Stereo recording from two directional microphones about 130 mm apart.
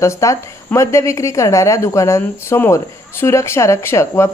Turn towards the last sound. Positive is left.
turn(degrees=20)  # may be behind; listen again after turning